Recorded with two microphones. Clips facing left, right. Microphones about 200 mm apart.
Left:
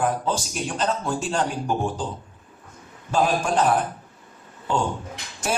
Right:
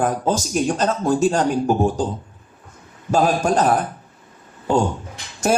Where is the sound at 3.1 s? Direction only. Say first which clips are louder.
Right 4 dB; 40° right (ahead or behind).